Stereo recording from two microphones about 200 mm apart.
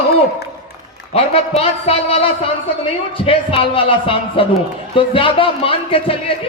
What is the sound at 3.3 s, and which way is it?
A man's voice, 30° left (ahead or behind).